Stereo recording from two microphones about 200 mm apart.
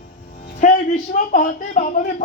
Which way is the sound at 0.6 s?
40° left (ahead or behind).